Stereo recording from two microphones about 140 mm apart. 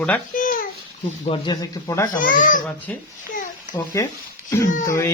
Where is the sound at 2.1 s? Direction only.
70° left (ahead or behind).